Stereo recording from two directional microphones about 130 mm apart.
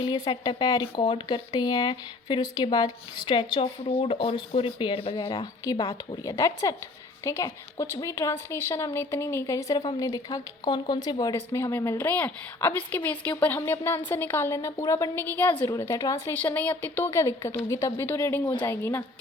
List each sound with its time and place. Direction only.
0.0 s speech: 35° left (ahead or behind)
5.3 s speech: 35° left (ahead or behind)
16.3 s speech: 15° left (ahead or behind)